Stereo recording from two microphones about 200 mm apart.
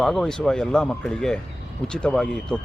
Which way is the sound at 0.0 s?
Centre (ahead or behind).